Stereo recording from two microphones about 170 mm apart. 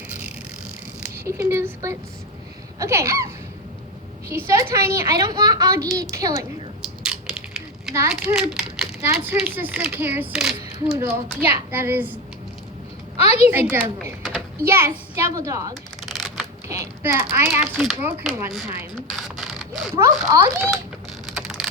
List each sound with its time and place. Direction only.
0.1 s vehicle: 10° right (ahead or behind)
1.2 s a woman's voice: 15° right (ahead or behind)
8.1 s a child's voice: 5° right (ahead or behind)
9.0 s speech: 15° right (ahead or behind)
10.9 s speech: 15° right (ahead or behind)
13.1 s a woman's voice: 40° left (ahead or behind)
13.5 s speech: 10° right (ahead or behind)
15.7 s shuffling cards: centre (ahead or behind)
16.6 s speech: 15° right (ahead or behind)
17.7 s speech: centre (ahead or behind)
18.9 s a sound: centre (ahead or behind)
20.0 s speech: 15° right (ahead or behind)
21.3 s vehicle: centre (ahead or behind)